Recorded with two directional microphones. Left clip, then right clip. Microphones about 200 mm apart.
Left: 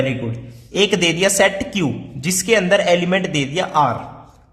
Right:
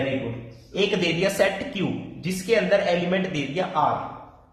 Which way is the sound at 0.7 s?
40° left (ahead or behind).